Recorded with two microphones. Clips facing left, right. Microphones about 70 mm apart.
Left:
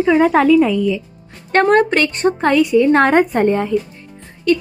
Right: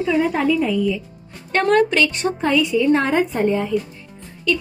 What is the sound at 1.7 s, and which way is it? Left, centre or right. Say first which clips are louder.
Speech: left 2 dB; left.